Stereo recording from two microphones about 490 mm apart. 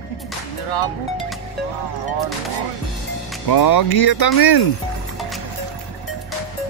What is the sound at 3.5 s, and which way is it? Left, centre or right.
Speech, left.